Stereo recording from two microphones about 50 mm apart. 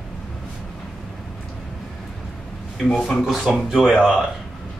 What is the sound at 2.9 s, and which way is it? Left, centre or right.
Speech, centre.